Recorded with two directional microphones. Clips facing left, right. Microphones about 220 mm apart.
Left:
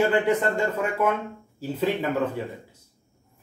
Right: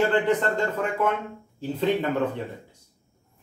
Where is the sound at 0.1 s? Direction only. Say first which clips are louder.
Even; 10° left (ahead or behind).